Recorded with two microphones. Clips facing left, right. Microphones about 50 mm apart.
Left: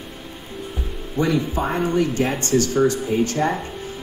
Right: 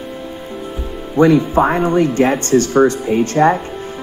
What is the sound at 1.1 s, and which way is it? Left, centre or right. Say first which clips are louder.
Speech: right 10 dB; right.